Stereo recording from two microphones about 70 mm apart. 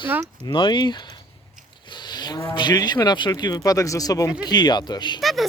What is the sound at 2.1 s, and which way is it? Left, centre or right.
Cattle, left.